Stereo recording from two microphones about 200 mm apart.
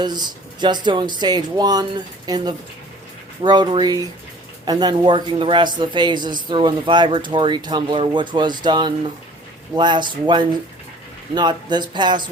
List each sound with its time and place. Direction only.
0.0 s a man's voice: 20° right (ahead or behind)